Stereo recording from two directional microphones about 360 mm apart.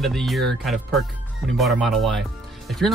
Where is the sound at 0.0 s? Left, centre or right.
Centre.